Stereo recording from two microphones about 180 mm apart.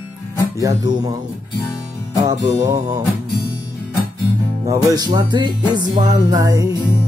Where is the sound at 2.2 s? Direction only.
20° right (ahead or behind).